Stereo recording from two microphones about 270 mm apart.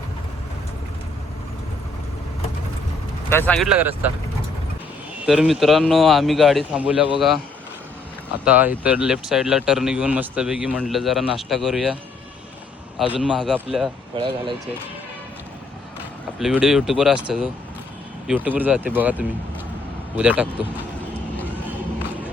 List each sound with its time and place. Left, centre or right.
3.2 s speech: centre
5.2 s speech: centre
8.4 s speech: centre
13.0 s speech: centre
14.1 s speech: centre
16.4 s speech: centre